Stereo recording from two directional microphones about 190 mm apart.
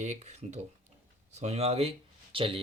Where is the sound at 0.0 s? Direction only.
35° right (ahead or behind).